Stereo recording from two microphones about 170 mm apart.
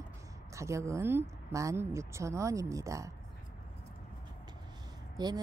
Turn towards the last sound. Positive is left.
turn(degrees=-25)  # may be behind; listen again after turning